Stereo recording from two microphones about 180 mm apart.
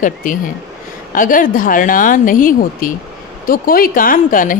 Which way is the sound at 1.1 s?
50° left (ahead or behind).